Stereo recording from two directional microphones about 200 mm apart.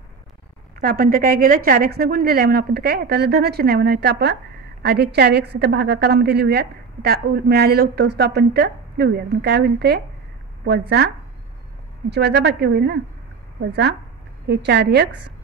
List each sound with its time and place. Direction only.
0.7 s a woman's voice: 45° right (ahead or behind)
12.1 s a woman's voice: 55° right (ahead or behind)